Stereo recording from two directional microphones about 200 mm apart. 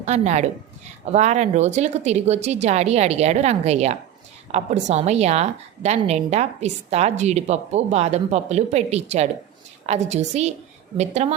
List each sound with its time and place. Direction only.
0.0 s a woman's voice: 35° right (ahead or behind)